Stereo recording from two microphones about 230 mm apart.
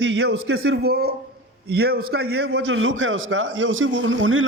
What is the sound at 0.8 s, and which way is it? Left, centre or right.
A woman's voice, right.